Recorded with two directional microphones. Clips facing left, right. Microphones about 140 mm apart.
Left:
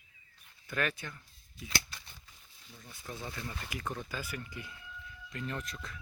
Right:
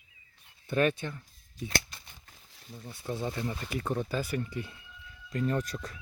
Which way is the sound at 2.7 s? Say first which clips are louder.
Right 9 dB; 30° right (ahead or behind).